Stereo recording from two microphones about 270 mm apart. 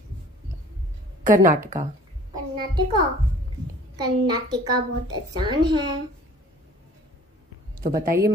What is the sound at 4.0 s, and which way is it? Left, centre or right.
Speech, centre.